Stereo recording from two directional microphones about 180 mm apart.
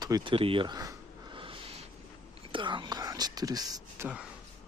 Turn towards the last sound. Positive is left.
turn(degrees=-20)  # may be behind; listen again after turning